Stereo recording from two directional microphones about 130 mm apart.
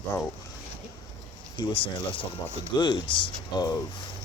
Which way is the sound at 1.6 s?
40° left (ahead or behind).